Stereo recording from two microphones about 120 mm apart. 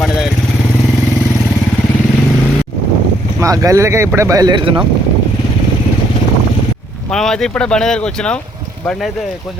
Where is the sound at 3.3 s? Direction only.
30° right (ahead or behind).